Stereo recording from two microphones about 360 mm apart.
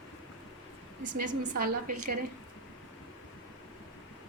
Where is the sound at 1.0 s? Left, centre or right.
Right.